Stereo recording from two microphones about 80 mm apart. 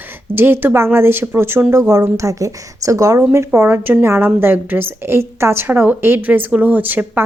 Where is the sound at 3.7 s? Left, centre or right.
Right.